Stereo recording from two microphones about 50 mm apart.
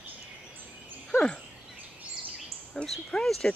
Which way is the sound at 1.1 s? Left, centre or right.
Centre.